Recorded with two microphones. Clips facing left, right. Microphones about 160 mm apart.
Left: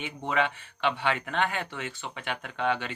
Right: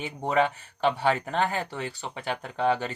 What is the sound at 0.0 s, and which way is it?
Speech, 40° right (ahead or behind).